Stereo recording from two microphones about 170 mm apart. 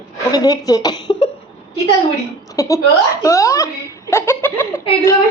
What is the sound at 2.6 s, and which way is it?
Speech, 20° left (ahead or behind).